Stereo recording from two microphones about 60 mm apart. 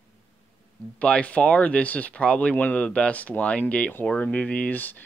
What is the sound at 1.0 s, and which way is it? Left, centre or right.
Speech, centre.